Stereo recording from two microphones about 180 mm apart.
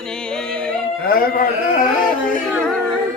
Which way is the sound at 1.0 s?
55° left (ahead or behind).